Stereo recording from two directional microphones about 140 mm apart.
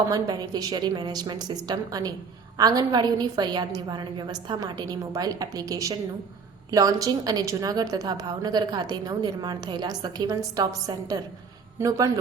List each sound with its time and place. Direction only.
0.1 s a woman's voice: 30° right (ahead or behind)
11.8 s a woman's voice: 25° right (ahead or behind)